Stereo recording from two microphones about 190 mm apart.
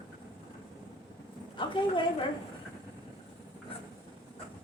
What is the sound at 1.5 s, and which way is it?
Speech, 25° left (ahead or behind).